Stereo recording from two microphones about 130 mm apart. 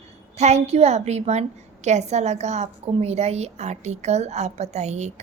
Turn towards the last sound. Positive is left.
turn(degrees=-60)  # may be behind; listen again after turning